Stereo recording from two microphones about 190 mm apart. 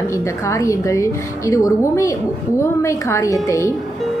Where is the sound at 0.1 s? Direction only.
15° left (ahead or behind).